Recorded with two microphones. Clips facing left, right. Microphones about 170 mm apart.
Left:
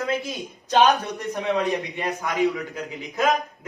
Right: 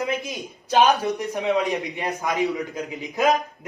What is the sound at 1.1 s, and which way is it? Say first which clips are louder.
A man's voice: right 2 dB; 15° right (ahead or behind).